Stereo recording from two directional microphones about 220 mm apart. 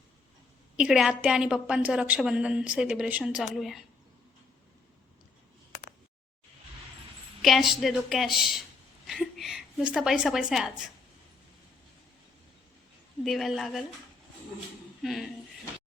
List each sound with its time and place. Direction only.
0.8 s a woman's voice: centre (ahead or behind)
7.4 s a woman's voice: centre (ahead or behind)
13.2 s a woman's voice: centre (ahead or behind)
15.0 s a woman's voice: centre (ahead or behind)